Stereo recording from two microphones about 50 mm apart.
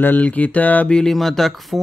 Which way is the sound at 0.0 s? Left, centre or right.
Left.